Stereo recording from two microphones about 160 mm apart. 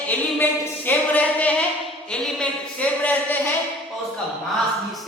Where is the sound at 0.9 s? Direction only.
10° left (ahead or behind).